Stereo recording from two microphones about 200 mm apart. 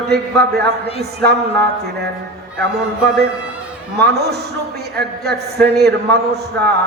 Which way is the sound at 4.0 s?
55° right (ahead or behind).